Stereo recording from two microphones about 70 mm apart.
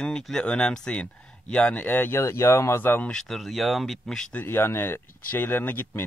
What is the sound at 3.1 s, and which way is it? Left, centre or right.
Speech, centre.